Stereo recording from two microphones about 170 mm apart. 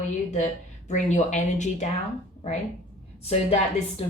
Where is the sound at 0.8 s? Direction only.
45° left (ahead or behind).